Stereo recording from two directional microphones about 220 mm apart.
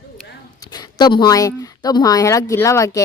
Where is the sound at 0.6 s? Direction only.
20° left (ahead or behind).